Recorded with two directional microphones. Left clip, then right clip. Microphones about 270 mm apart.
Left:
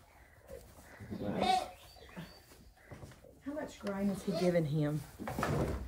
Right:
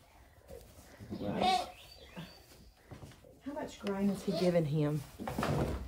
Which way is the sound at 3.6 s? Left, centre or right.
Centre.